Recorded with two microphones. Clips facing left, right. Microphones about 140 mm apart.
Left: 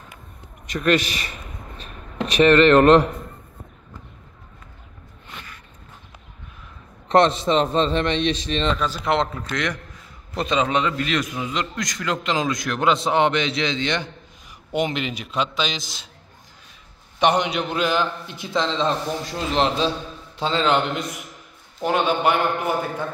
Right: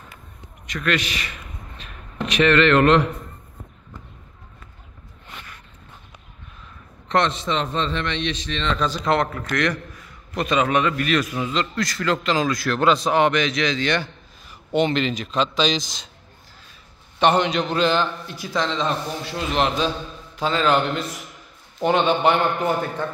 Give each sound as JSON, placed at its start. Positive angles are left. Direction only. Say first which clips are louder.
{"t": 2.4, "sound": "a man's voice", "louder": "left 3 dB", "side_deg": 40}
{"t": 7.1, "sound": "a man's voice", "louder": "left 4 dB", "side_deg": 35}
{"t": 8.7, "sound": "a man's voice", "louder": "right 1 dB", "side_deg": 10}
{"t": 9.2, "sound": "a man's voice", "louder": "right 2 dB", "side_deg": 20}
{"t": 17.2, "sound": "a man's voice", "louder": "right 1 dB", "side_deg": 15}
{"t": 18.3, "sound": "a man's voice", "louder": "left 1 dB", "side_deg": 25}
{"t": 21.8, "sound": "a man's voice", "louder": "right 2 dB", "side_deg": 5}